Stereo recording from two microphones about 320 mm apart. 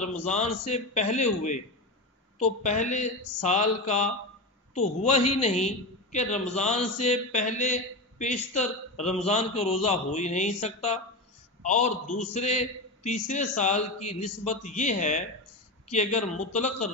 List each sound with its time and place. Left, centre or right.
0.0 s a man's voice: left